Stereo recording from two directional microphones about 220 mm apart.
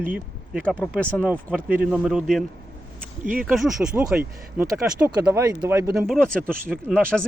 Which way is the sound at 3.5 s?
Centre (ahead or behind).